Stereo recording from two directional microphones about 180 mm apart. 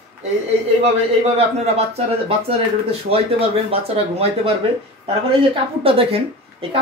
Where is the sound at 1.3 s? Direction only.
35° right (ahead or behind).